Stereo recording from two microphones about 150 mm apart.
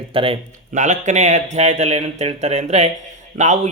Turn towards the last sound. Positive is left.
turn(degrees=-50)  # may be behind; listen again after turning